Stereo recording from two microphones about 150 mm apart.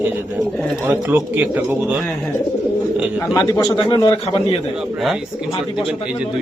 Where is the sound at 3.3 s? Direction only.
25° left (ahead or behind).